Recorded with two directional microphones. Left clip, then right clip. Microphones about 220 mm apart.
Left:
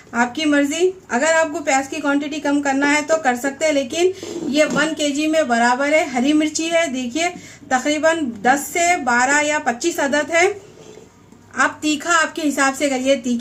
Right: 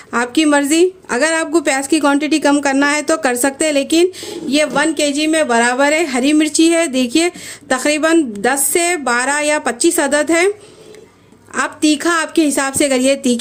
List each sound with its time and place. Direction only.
0.1 s a woman's voice: 50° right (ahead or behind)
11.5 s a woman's voice: 45° right (ahead or behind)